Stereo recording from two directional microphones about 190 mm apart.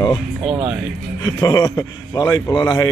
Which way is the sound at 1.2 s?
20° left (ahead or behind).